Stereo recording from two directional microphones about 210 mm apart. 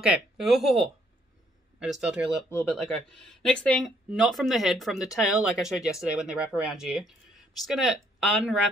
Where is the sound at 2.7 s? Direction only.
Centre (ahead or behind).